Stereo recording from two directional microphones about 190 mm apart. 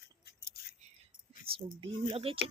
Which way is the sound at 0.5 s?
55° left (ahead or behind).